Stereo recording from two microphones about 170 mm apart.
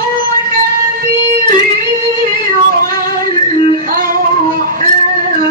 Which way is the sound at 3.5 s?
55° right (ahead or behind).